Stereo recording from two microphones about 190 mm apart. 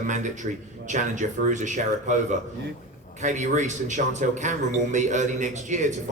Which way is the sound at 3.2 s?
40° right (ahead or behind).